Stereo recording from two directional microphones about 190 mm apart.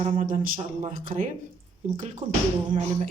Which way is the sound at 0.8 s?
30° right (ahead or behind).